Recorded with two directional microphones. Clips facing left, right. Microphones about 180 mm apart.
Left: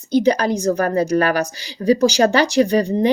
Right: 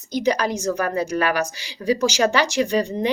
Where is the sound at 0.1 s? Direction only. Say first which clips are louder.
Left 5 dB; 30° left (ahead or behind).